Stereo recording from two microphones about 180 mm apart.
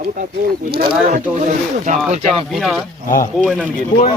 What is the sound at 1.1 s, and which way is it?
Speech, 45° right (ahead or behind).